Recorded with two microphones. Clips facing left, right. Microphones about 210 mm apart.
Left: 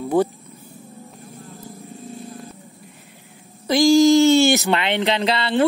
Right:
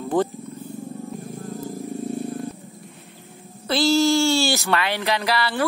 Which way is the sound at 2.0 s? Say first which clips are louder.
Right 8 dB; 65° right (ahead or behind).